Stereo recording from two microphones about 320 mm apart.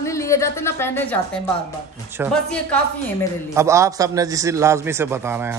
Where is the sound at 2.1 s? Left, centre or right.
Centre.